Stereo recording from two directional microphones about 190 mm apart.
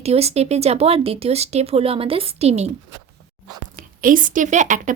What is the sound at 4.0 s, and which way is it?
Speech, 45° right (ahead or behind).